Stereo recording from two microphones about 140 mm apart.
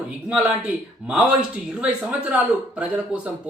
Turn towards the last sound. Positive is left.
turn(degrees=-10)  # may be behind; listen again after turning